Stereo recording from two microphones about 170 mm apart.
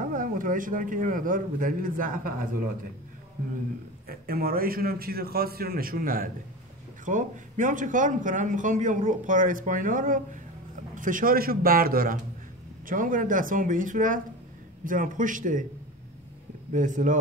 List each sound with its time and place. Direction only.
0.1 s a man's voice: 55° right (ahead or behind)
4.1 s a man's voice: 60° right (ahead or behind)
16.7 s a man's voice: 50° right (ahead or behind)